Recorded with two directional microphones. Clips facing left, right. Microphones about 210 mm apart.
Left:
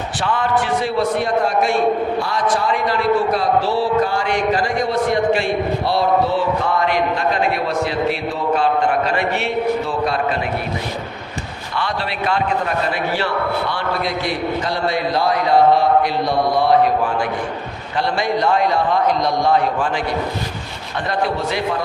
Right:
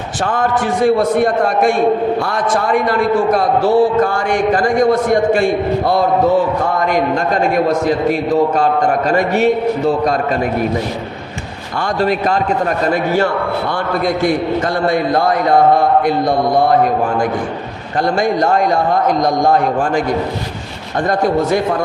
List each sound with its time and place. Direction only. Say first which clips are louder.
0.3 s a man's voice: right 2 dB; 45° right (ahead or behind)
11.8 s a man's voice: right 8 dB; 45° right (ahead or behind)
14.8 s a man's voice: right 4 dB; 50° right (ahead or behind)
18.2 s a man's voice: right 3 dB; 45° right (ahead or behind)
21.1 s a man's voice: right 7 dB; 45° right (ahead or behind)